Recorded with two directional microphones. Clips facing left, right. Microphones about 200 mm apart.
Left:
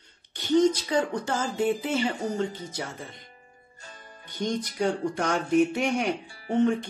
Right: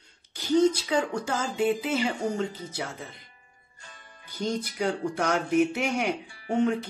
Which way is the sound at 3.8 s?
40° left (ahead or behind).